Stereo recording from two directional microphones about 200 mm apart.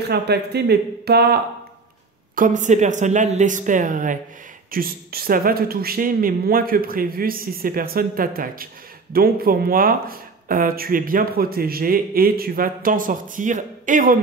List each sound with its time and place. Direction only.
0.1 s speech: 55° right (ahead or behind)
2.3 s a woman's voice: 40° right (ahead or behind)